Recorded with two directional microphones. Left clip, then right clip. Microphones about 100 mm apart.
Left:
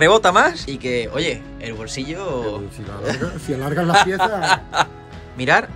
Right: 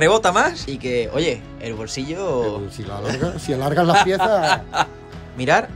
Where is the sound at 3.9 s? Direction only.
20° right (ahead or behind).